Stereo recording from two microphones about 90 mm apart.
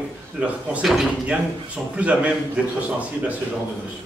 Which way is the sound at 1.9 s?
15° right (ahead or behind).